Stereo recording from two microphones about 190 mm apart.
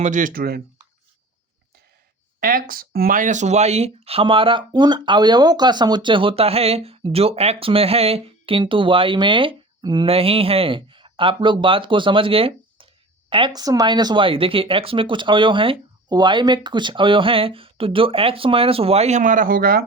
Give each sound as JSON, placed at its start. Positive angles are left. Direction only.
{"t": 0.0, "sound": "speech", "side_deg": -40}
{"t": 2.4, "sound": "speech", "side_deg": -50}